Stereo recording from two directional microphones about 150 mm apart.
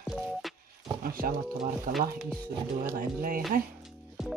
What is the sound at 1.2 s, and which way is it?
Speech, 65° right (ahead or behind).